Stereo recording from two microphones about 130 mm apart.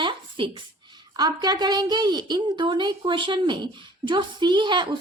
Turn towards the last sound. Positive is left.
turn(degrees=-35)  # may be behind; listen again after turning